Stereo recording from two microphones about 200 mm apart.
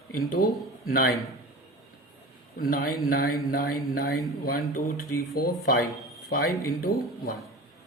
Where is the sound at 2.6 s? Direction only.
45° left (ahead or behind).